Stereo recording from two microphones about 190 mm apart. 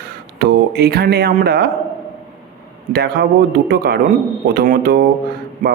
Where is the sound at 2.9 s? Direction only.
55° right (ahead or behind).